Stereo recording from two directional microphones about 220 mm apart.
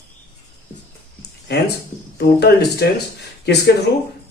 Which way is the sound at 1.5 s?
50° left (ahead or behind).